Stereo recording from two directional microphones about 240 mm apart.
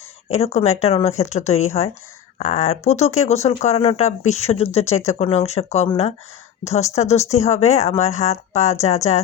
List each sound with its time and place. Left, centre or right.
0.3 s speech: left